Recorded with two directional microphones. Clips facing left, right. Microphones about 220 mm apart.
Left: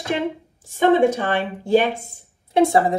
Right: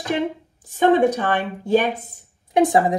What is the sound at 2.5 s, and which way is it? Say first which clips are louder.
Speech: even; 15° right (ahead or behind).